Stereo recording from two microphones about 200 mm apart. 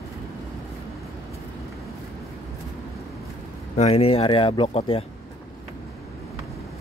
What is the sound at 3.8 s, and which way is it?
Speech, 30° left (ahead or behind).